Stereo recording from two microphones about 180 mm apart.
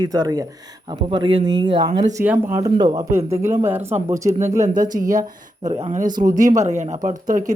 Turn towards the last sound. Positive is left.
turn(degrees=-45)  # may be behind; listen again after turning